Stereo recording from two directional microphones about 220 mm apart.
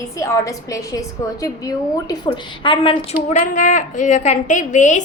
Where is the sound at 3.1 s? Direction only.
35° left (ahead or behind).